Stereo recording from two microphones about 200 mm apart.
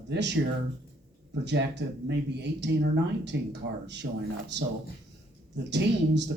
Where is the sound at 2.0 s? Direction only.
60° right (ahead or behind).